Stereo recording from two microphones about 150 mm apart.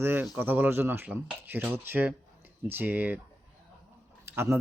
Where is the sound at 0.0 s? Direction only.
15° right (ahead or behind).